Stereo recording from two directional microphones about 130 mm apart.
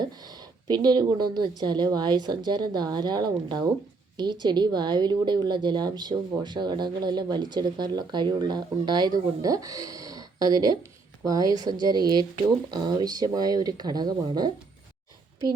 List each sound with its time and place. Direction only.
0.0 s speech: 30° right (ahead or behind)